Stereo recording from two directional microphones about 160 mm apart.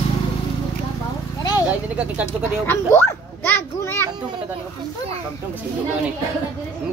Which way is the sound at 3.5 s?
15° left (ahead or behind).